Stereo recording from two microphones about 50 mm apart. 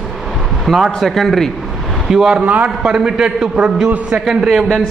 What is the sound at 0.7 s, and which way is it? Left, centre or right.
Speech, centre.